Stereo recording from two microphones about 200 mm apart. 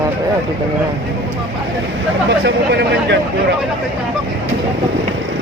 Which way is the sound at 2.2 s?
55° right (ahead or behind).